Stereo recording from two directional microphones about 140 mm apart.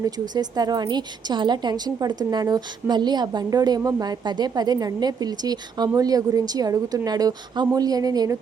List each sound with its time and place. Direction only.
0.0 s a woman's voice: 30° right (ahead or behind)